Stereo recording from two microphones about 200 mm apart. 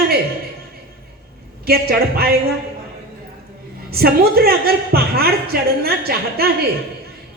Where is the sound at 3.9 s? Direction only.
50° right (ahead or behind).